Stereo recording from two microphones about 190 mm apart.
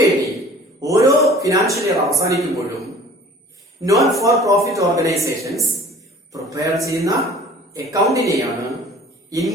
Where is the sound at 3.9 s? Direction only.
Centre (ahead or behind).